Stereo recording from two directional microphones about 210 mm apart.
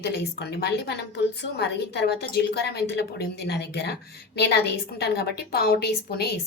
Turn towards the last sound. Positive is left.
turn(degrees=50)  # may be behind; listen again after turning